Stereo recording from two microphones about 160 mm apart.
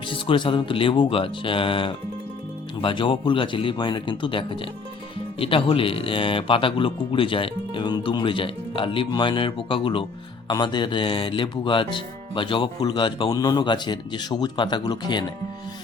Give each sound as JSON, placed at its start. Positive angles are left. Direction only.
{"t": 0.1, "sound": "speech", "side_deg": 30}